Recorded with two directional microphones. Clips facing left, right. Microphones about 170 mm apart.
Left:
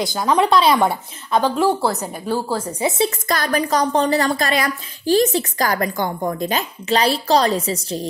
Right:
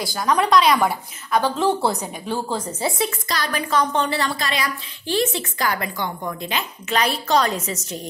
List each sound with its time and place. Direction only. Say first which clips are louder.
0.0 s speech: left 3 dB; 25° left (ahead or behind)
1.5 s a woman's voice: left 2 dB; 10° left (ahead or behind)
3.3 s a woman's voice: left 5 dB; 45° left (ahead or behind)